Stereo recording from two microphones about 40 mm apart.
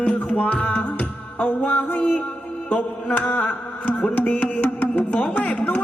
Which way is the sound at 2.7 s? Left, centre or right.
Left.